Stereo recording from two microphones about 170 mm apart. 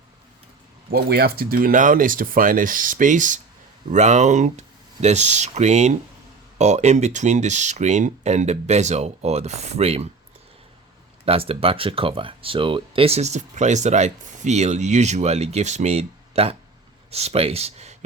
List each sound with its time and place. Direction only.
0.9 s speech: 65° right (ahead or behind); by 10.1 s 35° right (ahead or behind)
11.3 s speech: 35° right (ahead or behind)